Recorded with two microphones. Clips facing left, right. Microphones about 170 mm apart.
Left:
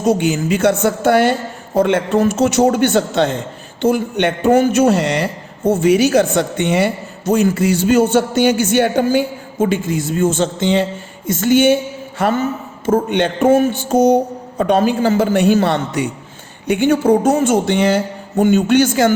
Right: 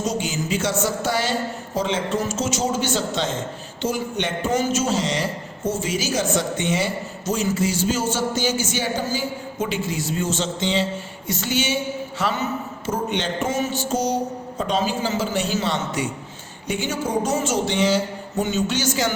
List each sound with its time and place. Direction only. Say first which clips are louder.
0.0 s a man's voice: left 9 dB; 60° left (ahead or behind)
11.3 s a sound: left 12 dB; 50° left (ahead or behind)
12.2 s a man's voice: left 8 dB; 50° left (ahead or behind)